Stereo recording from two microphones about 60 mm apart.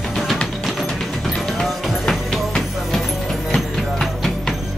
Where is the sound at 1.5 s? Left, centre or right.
Centre.